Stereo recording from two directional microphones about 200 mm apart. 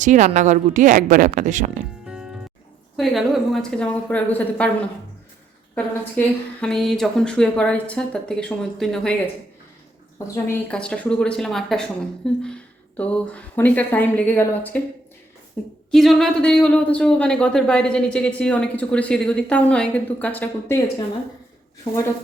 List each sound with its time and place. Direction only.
0.0 s speech: 35° right (ahead or behind)
2.0 s music: 5° right (ahead or behind)
3.0 s speech: centre (ahead or behind)
5.7 s speech: 5° left (ahead or behind)
10.3 s a woman's voice: 5° left (ahead or behind)